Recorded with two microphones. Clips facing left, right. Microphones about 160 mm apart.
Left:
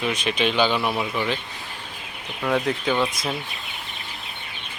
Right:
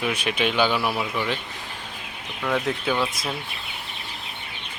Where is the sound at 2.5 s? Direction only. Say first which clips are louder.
Left 2 dB; 5° left (ahead or behind).